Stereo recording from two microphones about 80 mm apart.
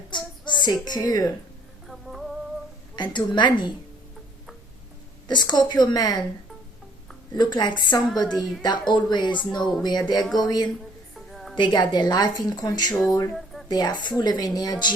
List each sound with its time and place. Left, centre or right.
0.1 s child singing: left
1.9 s music: centre
2.9 s speech: left
5.3 s a woman's voice: left
7.3 s a woman's voice: left
8.9 s speech: left
9.8 s speech: left
11.3 s music: centre
11.5 s a woman's voice: left
12.9 s speech: centre
13.3 s a sound: centre
13.7 s a woman's voice: left